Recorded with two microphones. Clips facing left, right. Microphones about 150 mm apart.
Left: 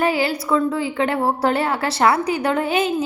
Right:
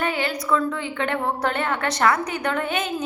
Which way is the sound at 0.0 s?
35° left (ahead or behind).